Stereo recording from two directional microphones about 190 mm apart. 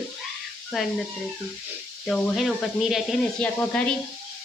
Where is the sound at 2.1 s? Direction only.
Centre (ahead or behind).